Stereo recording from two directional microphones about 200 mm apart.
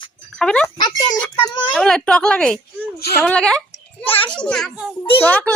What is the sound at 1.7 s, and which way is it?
A woman's voice, 5° left (ahead or behind).